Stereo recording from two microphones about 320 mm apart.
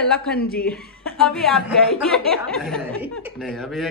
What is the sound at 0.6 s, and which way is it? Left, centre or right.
A woman's voice, centre.